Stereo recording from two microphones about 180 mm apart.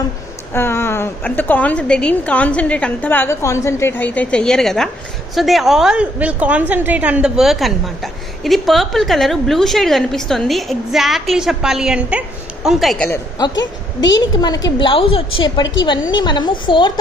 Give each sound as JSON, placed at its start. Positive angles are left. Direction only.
{"t": 0.5, "sound": "a woman's voice", "side_deg": 15}
{"t": 14.1, "sound": "a woman's voice", "side_deg": 20}